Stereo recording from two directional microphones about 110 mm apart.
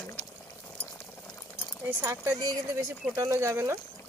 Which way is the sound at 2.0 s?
25° right (ahead or behind).